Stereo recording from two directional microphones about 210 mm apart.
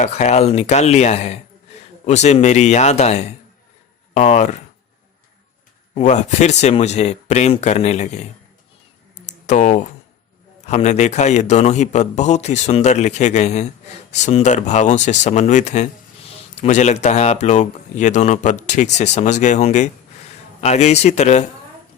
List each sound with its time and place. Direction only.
0.0 s a man's voice: 30° left (ahead or behind)
5.9 s a man's voice: 35° left (ahead or behind)
9.5 s a man's voice: 35° left (ahead or behind)